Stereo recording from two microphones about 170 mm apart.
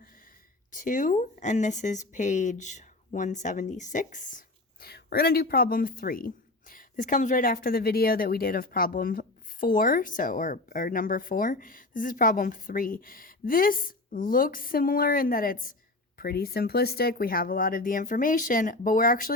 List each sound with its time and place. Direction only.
0.7 s speech: 50° left (ahead or behind)